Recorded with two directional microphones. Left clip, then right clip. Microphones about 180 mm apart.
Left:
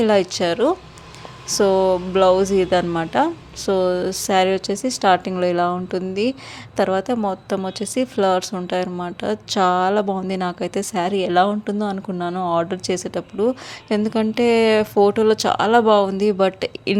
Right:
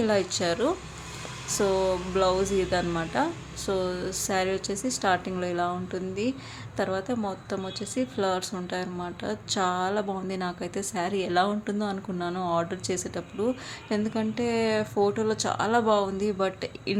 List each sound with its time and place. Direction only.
0.0 s a woman's voice: 35° left (ahead or behind)